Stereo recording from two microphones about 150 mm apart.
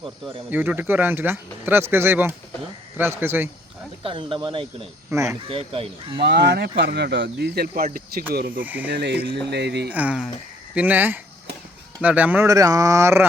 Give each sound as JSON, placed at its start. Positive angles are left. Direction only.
{"t": 0.5, "sound": "speech", "side_deg": -10}
{"t": 4.0, "sound": "speech", "side_deg": -35}
{"t": 5.1, "sound": "speech", "side_deg": -20}
{"t": 5.4, "sound": "speech", "side_deg": -40}
{"t": 6.2, "sound": "speech", "side_deg": -90}
{"t": 8.6, "sound": "speech", "side_deg": -10}
{"t": 8.9, "sound": "speech", "side_deg": -90}
{"t": 9.9, "sound": "speech", "side_deg": -10}
{"t": 12.5, "sound": "speech", "side_deg": -25}